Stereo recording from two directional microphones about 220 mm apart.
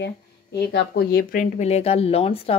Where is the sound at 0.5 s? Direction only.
50° left (ahead or behind); by 2.5 s 25° left (ahead or behind).